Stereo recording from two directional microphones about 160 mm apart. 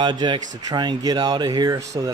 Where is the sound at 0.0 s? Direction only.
30° right (ahead or behind).